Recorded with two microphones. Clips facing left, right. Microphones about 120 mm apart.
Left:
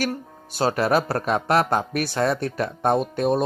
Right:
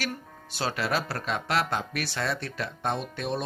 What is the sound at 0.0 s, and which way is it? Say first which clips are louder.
Speech: left 8 dB; 40° left (ahead or behind).